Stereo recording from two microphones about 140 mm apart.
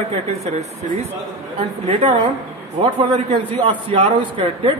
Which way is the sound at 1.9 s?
45° right (ahead or behind).